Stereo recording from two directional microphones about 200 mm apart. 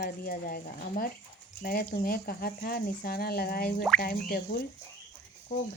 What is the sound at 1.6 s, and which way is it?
Speech, 45° left (ahead or behind).